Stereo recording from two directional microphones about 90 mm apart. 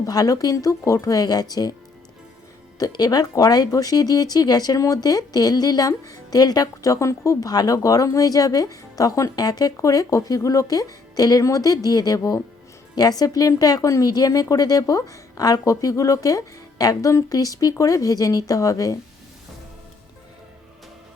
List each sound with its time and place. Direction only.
0.0 s speech: 45° left (ahead or behind)
2.7 s speech: 45° left (ahead or behind)